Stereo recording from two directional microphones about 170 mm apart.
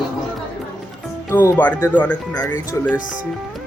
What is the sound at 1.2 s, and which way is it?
Speech, 15° left (ahead or behind).